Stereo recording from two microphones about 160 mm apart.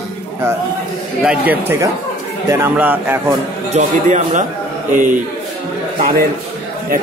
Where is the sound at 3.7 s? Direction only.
45° right (ahead or behind).